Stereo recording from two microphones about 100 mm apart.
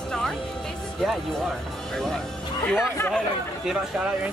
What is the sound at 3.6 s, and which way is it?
Speech, 5° right (ahead or behind).